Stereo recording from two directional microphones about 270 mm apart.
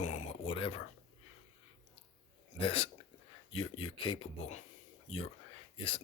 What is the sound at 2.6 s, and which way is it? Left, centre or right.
Speech, left.